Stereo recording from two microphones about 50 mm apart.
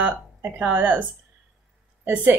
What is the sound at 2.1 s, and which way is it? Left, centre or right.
Speech, right.